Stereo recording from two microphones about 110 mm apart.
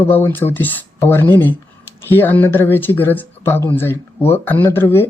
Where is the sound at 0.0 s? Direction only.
20° left (ahead or behind).